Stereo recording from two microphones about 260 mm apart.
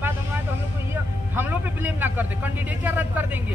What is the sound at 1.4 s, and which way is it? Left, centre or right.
A man's voice, centre.